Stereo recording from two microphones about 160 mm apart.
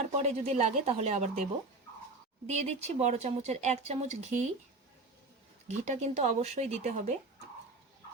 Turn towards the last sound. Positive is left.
turn(degrees=-45)  # may be behind; listen again after turning